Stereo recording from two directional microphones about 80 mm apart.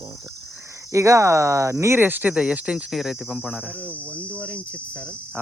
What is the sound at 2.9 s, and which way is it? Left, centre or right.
Cricket, centre.